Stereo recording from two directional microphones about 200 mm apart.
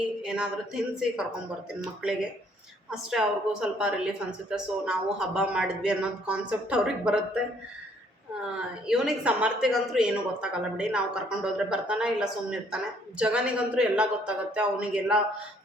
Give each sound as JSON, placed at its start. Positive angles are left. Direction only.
{"t": 0.2, "sound": "speech", "side_deg": -5}
{"t": 2.9, "sound": "speech", "side_deg": -5}
{"t": 8.9, "sound": "speech", "side_deg": -5}